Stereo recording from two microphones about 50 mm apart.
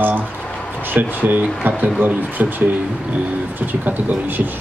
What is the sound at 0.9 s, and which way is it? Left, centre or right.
A man's voice, right.